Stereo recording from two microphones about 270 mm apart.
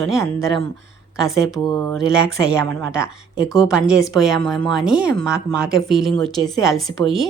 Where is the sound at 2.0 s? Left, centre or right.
Centre.